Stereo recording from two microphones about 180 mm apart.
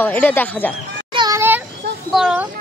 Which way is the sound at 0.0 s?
10° left (ahead or behind).